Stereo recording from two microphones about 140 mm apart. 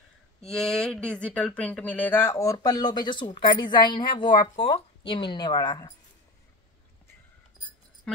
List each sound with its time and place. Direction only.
0.4 s speech: 5° left (ahead or behind); by 5.9 s 30° left (ahead or behind)